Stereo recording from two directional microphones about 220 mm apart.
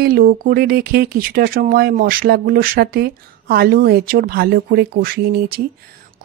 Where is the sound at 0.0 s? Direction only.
40° right (ahead or behind).